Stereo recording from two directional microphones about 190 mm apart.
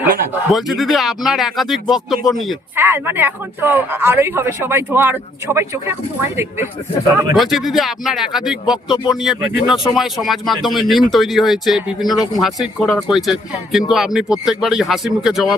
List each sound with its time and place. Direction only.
0.5 s speech: centre (ahead or behind)
2.7 s speech: 10° right (ahead or behind)
7.3 s speech: centre (ahead or behind)